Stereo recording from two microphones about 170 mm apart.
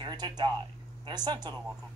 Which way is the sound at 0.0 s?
25° right (ahead or behind).